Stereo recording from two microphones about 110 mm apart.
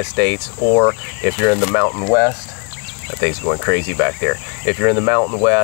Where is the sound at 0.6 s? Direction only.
35° left (ahead or behind).